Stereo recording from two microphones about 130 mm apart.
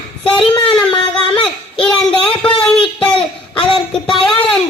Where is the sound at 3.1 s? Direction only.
40° left (ahead or behind).